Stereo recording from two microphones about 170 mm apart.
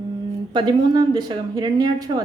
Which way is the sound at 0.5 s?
25° right (ahead or behind).